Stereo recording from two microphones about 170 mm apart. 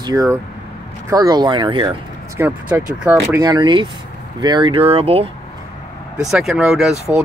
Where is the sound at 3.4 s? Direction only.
25° right (ahead or behind).